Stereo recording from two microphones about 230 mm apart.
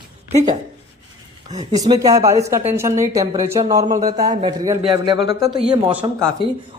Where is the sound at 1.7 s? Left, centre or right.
Centre.